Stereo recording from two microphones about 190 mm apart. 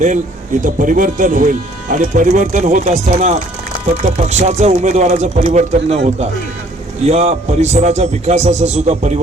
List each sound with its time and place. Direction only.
0.6 s a man's voice: 45° right (ahead or behind)
7.0 s a man's voice: 35° right (ahead or behind)